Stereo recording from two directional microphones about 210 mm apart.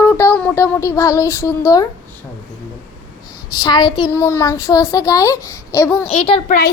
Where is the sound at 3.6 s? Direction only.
20° left (ahead or behind).